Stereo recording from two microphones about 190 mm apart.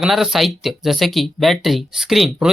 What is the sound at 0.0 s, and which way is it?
Speech, centre (ahead or behind).